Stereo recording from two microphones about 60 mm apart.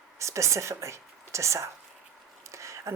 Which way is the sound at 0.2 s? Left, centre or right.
Right.